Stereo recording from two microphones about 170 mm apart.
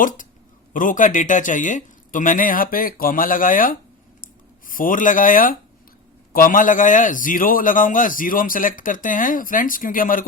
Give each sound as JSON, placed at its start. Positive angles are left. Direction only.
{"t": 0.0, "sound": "a man's voice", "side_deg": 50}